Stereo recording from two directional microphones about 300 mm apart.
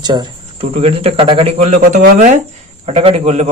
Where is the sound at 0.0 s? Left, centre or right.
Centre.